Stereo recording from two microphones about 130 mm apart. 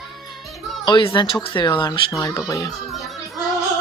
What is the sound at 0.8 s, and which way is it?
A man's voice, 35° left (ahead or behind).